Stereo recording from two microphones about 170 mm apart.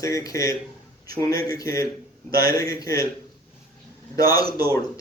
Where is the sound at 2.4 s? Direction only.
20° left (ahead or behind).